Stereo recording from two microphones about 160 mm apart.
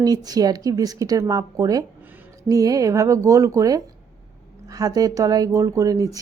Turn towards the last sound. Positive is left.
turn(degrees=-20)  # may be behind; listen again after turning